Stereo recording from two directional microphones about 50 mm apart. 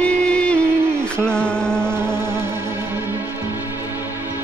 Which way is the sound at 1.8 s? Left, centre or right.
Right.